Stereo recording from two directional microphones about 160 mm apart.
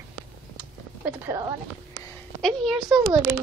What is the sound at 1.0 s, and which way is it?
Speech, 15° right (ahead or behind).